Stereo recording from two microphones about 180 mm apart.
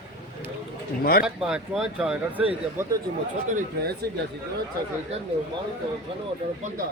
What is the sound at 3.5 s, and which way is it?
Speech, 55° right (ahead or behind).